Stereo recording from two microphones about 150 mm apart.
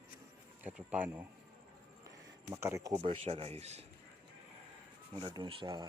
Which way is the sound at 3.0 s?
40° right (ahead or behind).